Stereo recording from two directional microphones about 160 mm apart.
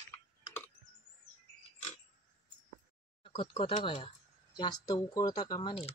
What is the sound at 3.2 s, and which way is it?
Speech, 35° left (ahead or behind).